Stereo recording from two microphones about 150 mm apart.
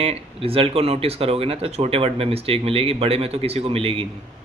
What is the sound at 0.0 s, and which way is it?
Speech, 40° right (ahead or behind).